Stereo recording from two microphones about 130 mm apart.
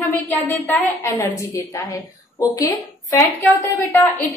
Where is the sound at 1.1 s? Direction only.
25° left (ahead or behind).